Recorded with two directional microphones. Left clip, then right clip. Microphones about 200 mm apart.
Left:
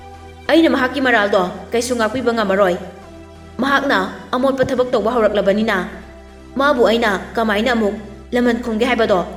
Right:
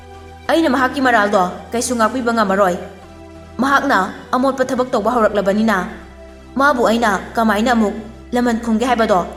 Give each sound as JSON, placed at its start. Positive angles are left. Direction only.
{"t": 0.4, "sound": "a woman's voice", "side_deg": 40}